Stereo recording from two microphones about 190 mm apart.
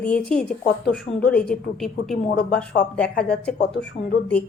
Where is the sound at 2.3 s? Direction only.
50° left (ahead or behind).